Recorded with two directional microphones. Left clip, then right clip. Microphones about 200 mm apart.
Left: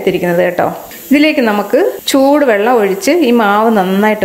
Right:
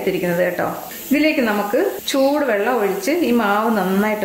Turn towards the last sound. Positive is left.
turn(degrees=40)  # may be behind; listen again after turning